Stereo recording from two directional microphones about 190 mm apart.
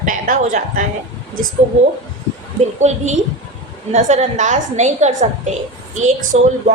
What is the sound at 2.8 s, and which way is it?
A woman's voice, 35° right (ahead or behind).